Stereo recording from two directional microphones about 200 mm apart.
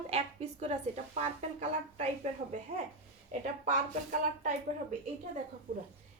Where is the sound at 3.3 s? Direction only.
35° right (ahead or behind).